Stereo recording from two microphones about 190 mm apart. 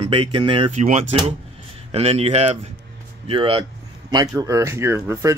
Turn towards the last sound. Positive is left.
turn(degrees=-15)  # may be behind; listen again after turning